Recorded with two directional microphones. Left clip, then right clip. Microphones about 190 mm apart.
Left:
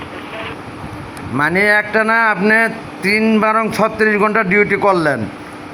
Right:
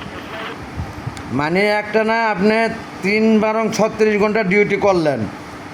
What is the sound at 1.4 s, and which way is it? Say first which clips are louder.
A man's voice: left 4 dB; 10° right (ahead or behind).